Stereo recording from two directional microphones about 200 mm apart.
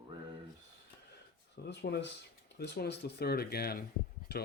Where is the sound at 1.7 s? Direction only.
60° left (ahead or behind).